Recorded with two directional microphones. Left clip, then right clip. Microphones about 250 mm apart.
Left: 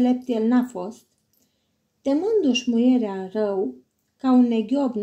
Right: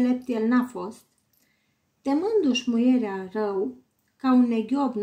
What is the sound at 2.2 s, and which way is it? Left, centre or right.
A woman's voice, centre.